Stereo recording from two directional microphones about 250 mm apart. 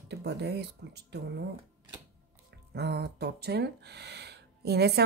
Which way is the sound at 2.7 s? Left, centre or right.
Right.